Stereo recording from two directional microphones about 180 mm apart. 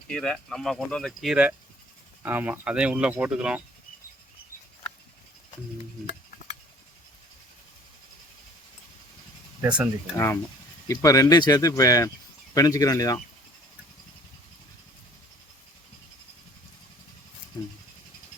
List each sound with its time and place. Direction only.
0.1 s speech: 5° left (ahead or behind)
9.6 s speech: 10° right (ahead or behind)
10.8 s speech: 20° left (ahead or behind)